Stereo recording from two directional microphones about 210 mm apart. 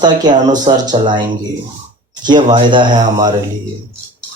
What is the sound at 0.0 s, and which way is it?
Speech, 20° right (ahead or behind).